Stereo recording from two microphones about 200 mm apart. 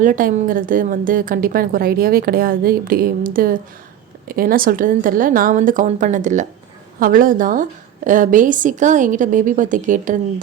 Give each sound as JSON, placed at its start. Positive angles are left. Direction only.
{"t": 0.0, "sound": "a woman's voice", "side_deg": -40}